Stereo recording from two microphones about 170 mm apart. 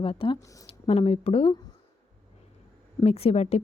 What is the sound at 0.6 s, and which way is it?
Speech, 35° left (ahead or behind).